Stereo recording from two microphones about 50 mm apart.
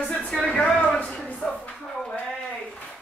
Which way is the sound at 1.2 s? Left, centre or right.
Left.